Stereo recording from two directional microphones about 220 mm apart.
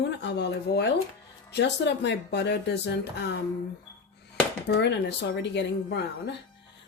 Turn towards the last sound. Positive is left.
turn(degrees=50)  # may be behind; listen again after turning